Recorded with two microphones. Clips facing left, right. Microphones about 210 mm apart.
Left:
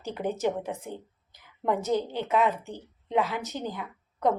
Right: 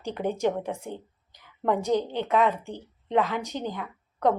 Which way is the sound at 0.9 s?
15° right (ahead or behind).